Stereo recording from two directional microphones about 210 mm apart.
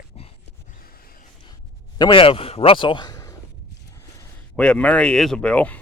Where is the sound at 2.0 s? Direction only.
25° left (ahead or behind).